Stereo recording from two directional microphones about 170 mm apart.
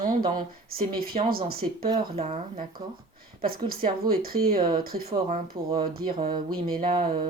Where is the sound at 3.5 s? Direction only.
60° right (ahead or behind).